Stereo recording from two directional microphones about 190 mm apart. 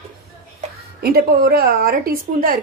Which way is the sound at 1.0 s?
55° right (ahead or behind).